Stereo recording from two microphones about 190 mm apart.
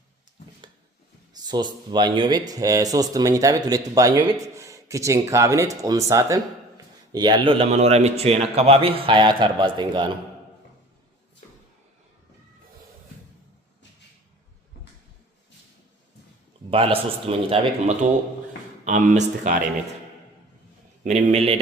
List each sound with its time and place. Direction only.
1.5 s speech: 25° right (ahead or behind)
16.6 s speech: 30° right (ahead or behind)
18.9 s speech: 40° right (ahead or behind)
21.0 s speech: 35° right (ahead or behind)